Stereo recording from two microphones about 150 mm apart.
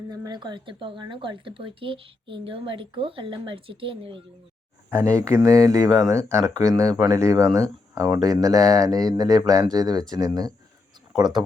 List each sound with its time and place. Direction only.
0.1 s speech: 30° right (ahead or behind)
4.9 s speech: 20° right (ahead or behind)